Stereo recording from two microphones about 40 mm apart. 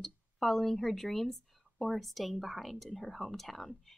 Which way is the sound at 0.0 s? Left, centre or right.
Centre.